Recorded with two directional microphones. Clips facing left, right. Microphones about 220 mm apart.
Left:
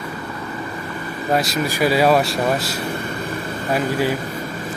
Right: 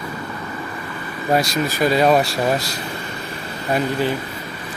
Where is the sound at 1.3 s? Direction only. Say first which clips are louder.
Right 1 dB; centre (ahead or behind).